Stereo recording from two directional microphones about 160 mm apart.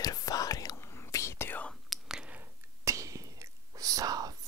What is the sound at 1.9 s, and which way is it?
Whispering, 5° right (ahead or behind).